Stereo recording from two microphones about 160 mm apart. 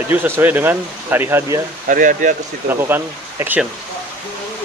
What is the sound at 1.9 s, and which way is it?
Speech, 55° right (ahead or behind).